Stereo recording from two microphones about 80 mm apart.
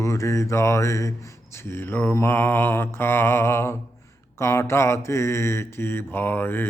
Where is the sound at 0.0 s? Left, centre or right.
Left.